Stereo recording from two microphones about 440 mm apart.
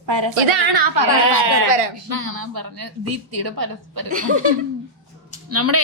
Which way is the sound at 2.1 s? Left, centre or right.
Right.